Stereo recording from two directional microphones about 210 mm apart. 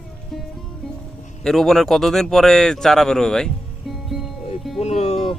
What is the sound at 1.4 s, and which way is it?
Speech, centre (ahead or behind).